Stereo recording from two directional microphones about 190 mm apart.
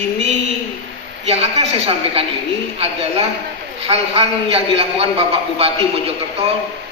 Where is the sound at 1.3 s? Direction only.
30° right (ahead or behind).